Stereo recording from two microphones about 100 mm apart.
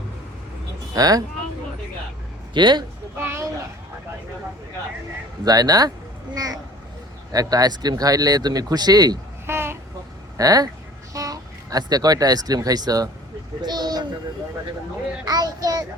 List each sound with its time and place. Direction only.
0.9 s speech: 40° right (ahead or behind)
2.5 s a man's voice: 50° right (ahead or behind)
3.2 s a sound: 20° right (ahead or behind)
5.5 s speech: 40° right (ahead or behind)
6.3 s vehicle: 40° right (ahead or behind)
7.3 s speech: 40° right (ahead or behind)
9.5 s babbling: 25° right (ahead or behind)
10.3 s speech: 40° right (ahead or behind)
13.6 s a sound: 45° right (ahead or behind)
15.3 s child singing: 40° right (ahead or behind)